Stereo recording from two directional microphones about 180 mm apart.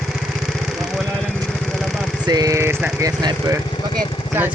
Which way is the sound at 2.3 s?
20° right (ahead or behind).